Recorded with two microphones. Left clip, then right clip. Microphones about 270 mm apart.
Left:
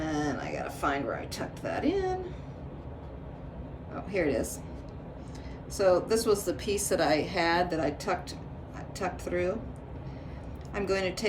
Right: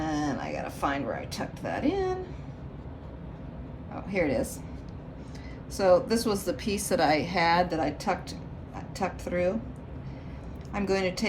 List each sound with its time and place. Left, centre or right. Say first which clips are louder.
0.0 s a sound: right 1 dB; centre
0.6 s a woman's voice: left 1 dB; right
3.9 s a woman's voice: right 1 dB; right
5.7 s a woman's voice: right 2 dB; right
10.8 s a woman's voice: right 2 dB; right